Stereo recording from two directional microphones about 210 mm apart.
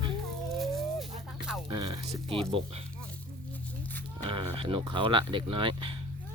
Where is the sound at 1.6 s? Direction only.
20° right (ahead or behind).